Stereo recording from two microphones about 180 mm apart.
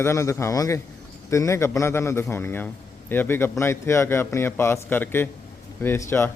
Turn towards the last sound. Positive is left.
turn(degrees=15)  # may be behind; listen again after turning